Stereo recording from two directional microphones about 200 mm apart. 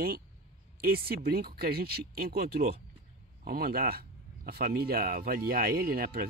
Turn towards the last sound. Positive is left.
turn(degrees=-50)  # may be behind; listen again after turning